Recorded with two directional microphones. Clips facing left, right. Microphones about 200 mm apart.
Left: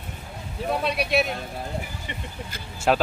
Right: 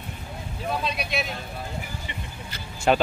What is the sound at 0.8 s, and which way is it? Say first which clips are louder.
Speech: left 5 dB; 65° left (ahead or behind).